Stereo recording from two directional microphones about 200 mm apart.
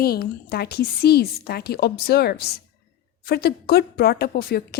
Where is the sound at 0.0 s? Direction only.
50° left (ahead or behind).